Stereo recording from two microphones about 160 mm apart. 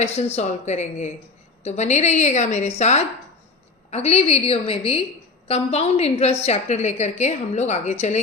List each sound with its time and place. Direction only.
0.0 s a woman's voice: 40° left (ahead or behind)